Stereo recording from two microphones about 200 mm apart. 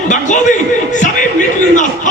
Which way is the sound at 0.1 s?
40° left (ahead or behind).